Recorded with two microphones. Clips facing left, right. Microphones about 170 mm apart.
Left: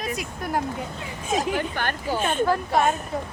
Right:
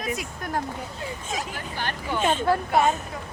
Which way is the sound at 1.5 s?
60° left (ahead or behind).